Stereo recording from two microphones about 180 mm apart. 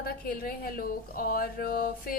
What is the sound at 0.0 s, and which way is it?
A woman's voice, 55° left (ahead or behind).